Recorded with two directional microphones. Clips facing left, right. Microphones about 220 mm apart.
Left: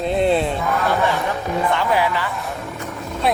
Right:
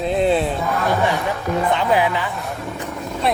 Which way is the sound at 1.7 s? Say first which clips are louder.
Right 2 dB; 20° right (ahead or behind).